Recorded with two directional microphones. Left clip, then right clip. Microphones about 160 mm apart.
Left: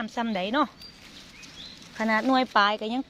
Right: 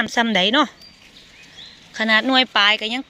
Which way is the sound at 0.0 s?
55° right (ahead or behind).